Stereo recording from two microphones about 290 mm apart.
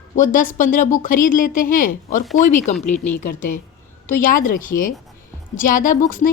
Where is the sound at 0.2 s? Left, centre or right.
Left.